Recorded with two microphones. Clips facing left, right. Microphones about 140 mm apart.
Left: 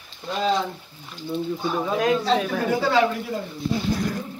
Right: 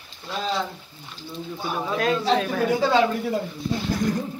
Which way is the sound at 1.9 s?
15° left (ahead or behind).